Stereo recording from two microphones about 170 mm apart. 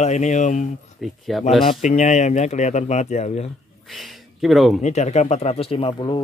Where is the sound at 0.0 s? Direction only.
45° left (ahead or behind).